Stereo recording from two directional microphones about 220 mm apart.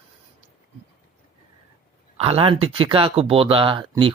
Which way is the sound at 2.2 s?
25° right (ahead or behind).